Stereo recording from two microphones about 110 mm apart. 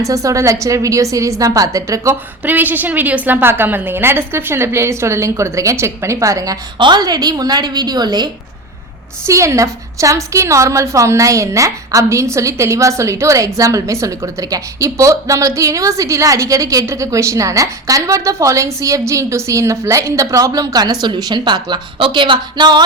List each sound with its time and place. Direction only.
0.0 s a woman's voice: 30° right (ahead or behind)
2.4 s a woman's voice: 15° right (ahead or behind)
6.7 s a woman's voice: 45° right (ahead or behind)
9.2 s a woman's voice: 25° right (ahead or behind); by 22.8 s 45° right (ahead or behind)